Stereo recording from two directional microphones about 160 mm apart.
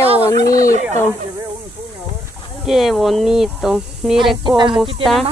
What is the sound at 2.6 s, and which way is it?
Speech, centre (ahead or behind).